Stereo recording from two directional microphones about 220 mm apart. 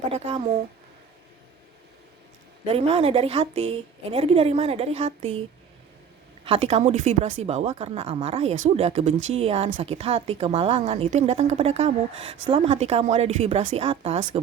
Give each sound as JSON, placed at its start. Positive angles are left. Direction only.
{"t": 0.1, "sound": "a woman's voice", "side_deg": -25}
{"t": 2.6, "sound": "a woman's voice", "side_deg": -25}
{"t": 6.4, "sound": "a woman's voice", "side_deg": -25}